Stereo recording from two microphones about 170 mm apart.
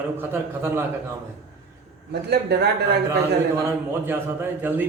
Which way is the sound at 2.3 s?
75° right (ahead or behind).